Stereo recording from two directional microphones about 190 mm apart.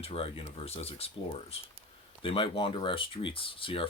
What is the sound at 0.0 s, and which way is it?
Speech, 30° left (ahead or behind).